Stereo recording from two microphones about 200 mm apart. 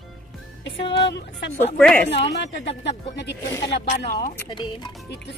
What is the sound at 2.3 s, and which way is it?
Speech, 60° left (ahead or behind).